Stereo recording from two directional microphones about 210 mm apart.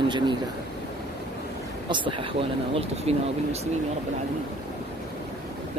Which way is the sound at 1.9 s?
25° right (ahead or behind).